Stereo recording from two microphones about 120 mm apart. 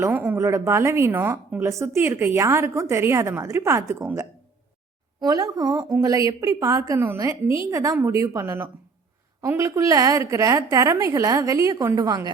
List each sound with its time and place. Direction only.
0.0 s a woman's voice: 15° right (ahead or behind); by 12.3 s 35° right (ahead or behind)